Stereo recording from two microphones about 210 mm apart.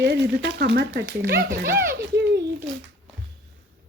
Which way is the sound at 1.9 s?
55° right (ahead or behind).